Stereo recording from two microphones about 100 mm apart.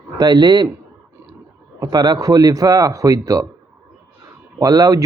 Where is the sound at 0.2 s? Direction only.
45° right (ahead or behind).